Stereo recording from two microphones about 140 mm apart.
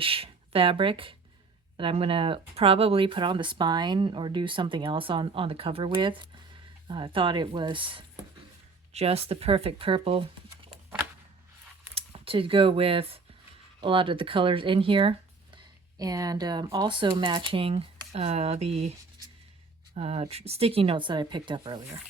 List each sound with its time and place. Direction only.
0.0 s speech: 40° right (ahead or behind)
11.9 s speech: 40° right (ahead or behind)
16.0 s speech: 25° right (ahead or behind)